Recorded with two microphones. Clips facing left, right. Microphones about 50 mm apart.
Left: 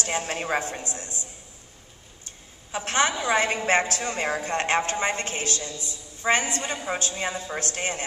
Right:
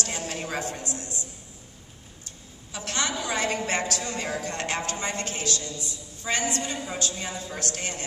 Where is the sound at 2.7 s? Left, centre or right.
Left.